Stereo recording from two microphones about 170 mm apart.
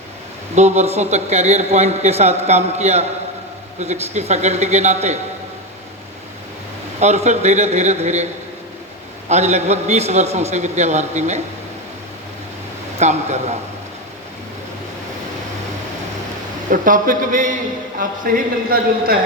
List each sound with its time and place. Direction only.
0.5 s speech: 40° right (ahead or behind)
7.0 s speech: 40° right (ahead or behind)
9.3 s speech: 40° right (ahead or behind)
13.0 s speech: 40° right (ahead or behind)
16.7 s a man's voice: 50° right (ahead or behind)
18.3 s a man's voice: 60° right (ahead or behind)